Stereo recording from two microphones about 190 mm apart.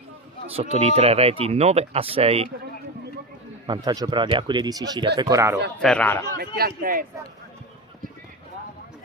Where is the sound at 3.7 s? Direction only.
20° right (ahead or behind).